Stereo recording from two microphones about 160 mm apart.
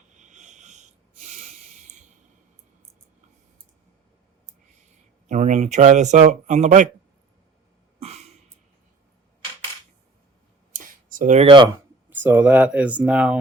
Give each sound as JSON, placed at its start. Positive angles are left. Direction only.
{"t": 0.2, "sound": "snort", "side_deg": -50}
{"t": 5.3, "sound": "speech", "side_deg": -50}
{"t": 7.9, "sound": "cough", "side_deg": -45}
{"t": 10.7, "sound": "a sound", "side_deg": -55}
{"t": 11.4, "sound": "speech", "side_deg": -30}
{"t": 12.1, "sound": "speech", "side_deg": -10}